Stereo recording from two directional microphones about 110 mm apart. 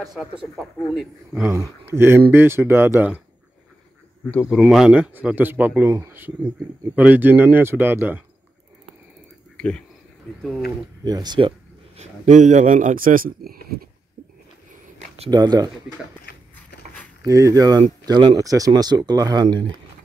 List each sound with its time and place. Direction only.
0.0 s a man's voice: 5° right (ahead or behind)
1.6 s speech: 20° right (ahead or behind)
4.5 s a man's voice: centre (ahead or behind)
5.1 s speech: 15° right (ahead or behind)
9.6 s speech: 10° left (ahead or behind)
11.1 s speech: 40° right (ahead or behind)
12.0 s a man's voice: 90° right
15.0 s a sound: 65° right (ahead or behind)
15.3 s speech: 35° right (ahead or behind)
16.5 s a sound: 15° left (ahead or behind)
17.2 s speech: 30° right (ahead or behind)